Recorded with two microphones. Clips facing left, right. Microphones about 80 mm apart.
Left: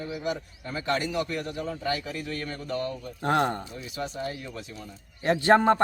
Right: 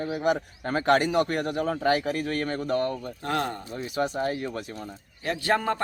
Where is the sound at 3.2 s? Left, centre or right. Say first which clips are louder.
Left 5 dB; left.